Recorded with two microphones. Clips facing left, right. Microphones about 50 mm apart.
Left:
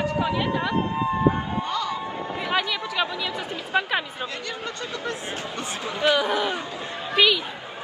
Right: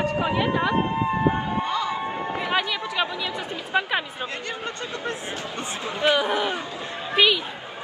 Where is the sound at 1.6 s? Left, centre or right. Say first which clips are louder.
Right 2 dB; right.